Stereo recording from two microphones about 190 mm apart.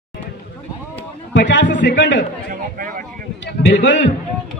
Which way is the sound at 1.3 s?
70° left (ahead or behind).